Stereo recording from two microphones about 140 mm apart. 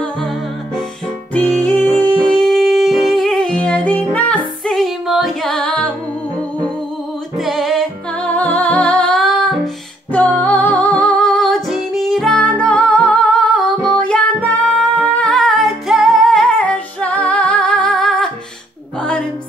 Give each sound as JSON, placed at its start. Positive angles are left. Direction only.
{"t": 1.3, "sound": "music", "side_deg": 10}
{"t": 7.3, "sound": "music", "side_deg": 0}
{"t": 8.3, "sound": "music", "side_deg": 10}
{"t": 10.1, "sound": "music", "side_deg": 10}
{"t": 15.0, "sound": "humming", "side_deg": 5}
{"t": 18.9, "sound": "music", "side_deg": 5}